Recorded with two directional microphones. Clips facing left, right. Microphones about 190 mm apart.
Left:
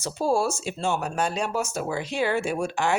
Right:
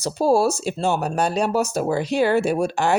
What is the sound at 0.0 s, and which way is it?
Speech, 40° right (ahead or behind).